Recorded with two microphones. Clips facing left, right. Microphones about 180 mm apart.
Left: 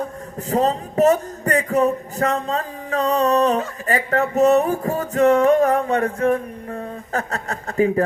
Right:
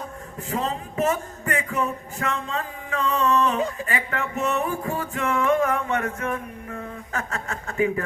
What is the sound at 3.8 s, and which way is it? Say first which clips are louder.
Music: left 8 dB; 40° left (ahead or behind).